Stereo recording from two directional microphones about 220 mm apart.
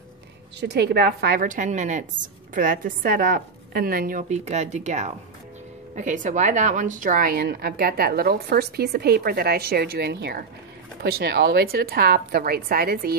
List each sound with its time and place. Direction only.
0.6 s a woman's voice: 50° right (ahead or behind)